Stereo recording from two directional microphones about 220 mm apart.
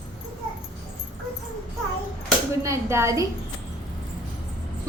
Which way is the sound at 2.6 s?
10° right (ahead or behind).